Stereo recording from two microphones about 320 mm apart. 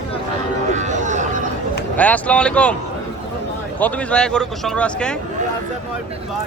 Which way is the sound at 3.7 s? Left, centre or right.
Centre.